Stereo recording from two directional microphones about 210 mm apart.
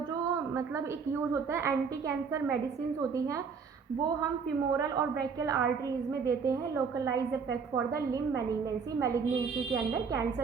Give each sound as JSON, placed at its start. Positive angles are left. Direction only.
{"t": 1.1, "sound": "a woman's voice", "side_deg": -10}
{"t": 4.9, "sound": "a woman's voice", "side_deg": -15}